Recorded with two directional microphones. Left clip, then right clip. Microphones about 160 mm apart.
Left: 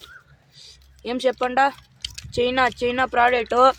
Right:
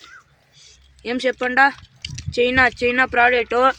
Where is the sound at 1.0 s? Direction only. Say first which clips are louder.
Right 1 dB; 5° right (ahead or behind).